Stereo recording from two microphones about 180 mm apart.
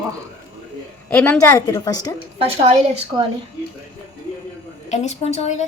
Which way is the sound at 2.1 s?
35° right (ahead or behind).